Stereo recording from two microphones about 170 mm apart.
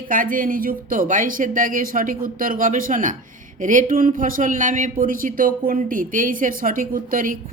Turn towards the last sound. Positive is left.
turn(degrees=-55)  # may be behind; listen again after turning